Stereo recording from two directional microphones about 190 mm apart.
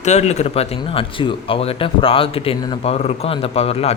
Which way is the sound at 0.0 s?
35° left (ahead or behind).